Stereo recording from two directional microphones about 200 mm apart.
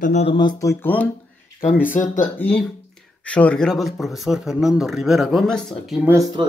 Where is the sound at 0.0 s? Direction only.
35° left (ahead or behind); by 1.1 s 10° left (ahead or behind).